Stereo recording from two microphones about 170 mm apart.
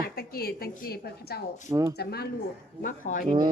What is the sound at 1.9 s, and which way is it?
Speech, 70° left (ahead or behind).